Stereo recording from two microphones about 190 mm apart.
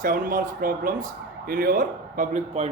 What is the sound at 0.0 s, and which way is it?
Speech, 45° right (ahead or behind).